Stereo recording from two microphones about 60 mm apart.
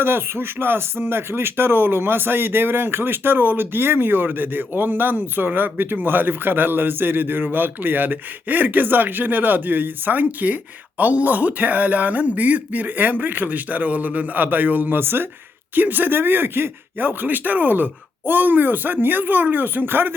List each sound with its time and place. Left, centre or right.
0.0 s speech: right